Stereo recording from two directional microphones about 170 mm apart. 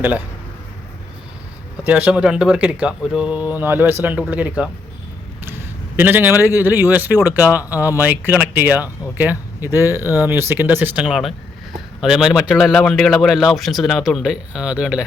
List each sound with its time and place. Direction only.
1.8 s speech: 10° right (ahead or behind)
6.0 s a man's voice: 10° right (ahead or behind)